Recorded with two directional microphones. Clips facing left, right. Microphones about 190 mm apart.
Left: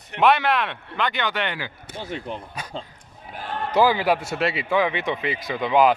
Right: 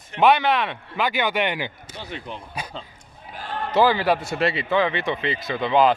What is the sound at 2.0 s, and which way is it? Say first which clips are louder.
Speech: left 4 dB; 45° left (ahead or behind).